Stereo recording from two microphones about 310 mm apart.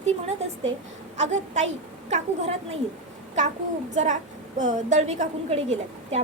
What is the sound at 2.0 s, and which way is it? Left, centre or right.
Speech, right.